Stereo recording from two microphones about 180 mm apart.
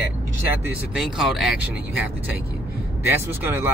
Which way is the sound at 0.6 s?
Centre (ahead or behind).